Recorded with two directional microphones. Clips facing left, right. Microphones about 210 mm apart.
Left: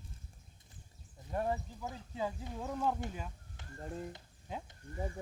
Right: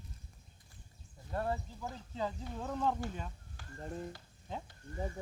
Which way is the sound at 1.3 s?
15° left (ahead or behind).